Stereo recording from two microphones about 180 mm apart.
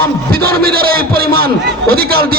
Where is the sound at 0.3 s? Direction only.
55° right (ahead or behind).